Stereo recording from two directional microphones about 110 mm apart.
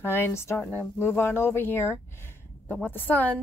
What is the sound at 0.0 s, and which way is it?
Speech, 20° left (ahead or behind).